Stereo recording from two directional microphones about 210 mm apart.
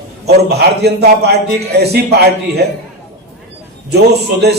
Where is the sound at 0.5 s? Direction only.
50° right (ahead or behind).